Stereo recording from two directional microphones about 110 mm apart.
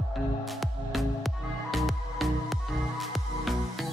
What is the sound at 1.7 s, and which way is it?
Music, centre (ahead or behind).